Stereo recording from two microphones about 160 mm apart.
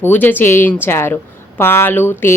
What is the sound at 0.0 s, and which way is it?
A woman's voice, 10° left (ahead or behind).